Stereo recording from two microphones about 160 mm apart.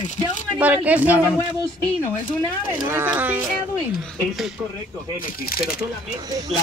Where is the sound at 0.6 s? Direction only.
10° right (ahead or behind).